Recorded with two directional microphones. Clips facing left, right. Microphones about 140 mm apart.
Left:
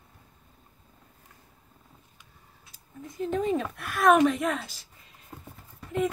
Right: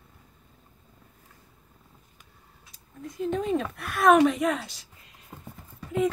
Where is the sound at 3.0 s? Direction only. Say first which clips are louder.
Even; centre (ahead or behind).